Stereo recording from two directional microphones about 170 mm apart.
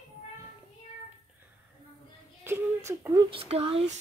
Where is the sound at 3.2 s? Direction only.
35° right (ahead or behind).